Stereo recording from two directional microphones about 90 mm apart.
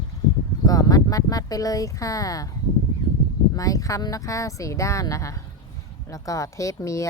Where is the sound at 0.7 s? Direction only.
45° left (ahead or behind).